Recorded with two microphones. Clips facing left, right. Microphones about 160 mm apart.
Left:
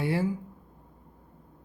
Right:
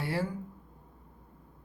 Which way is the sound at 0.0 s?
20° left (ahead or behind).